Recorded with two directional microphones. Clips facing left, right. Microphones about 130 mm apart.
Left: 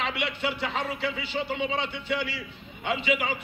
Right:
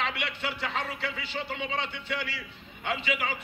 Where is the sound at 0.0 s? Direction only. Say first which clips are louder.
Left 3 dB; 20° left (ahead or behind).